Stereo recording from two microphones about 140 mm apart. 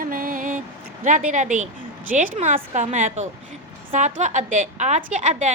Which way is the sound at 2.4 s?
60° right (ahead or behind).